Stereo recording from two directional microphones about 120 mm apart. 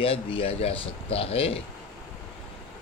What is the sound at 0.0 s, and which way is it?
A man's voice, 50° left (ahead or behind).